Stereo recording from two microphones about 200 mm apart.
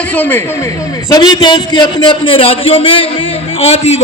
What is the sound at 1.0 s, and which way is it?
A man's voice, 20° left (ahead or behind).